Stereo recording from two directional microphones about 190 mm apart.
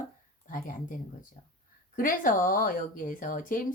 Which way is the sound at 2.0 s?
45° left (ahead or behind).